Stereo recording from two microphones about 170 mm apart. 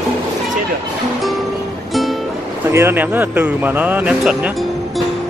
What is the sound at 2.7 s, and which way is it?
Speech, 10° right (ahead or behind).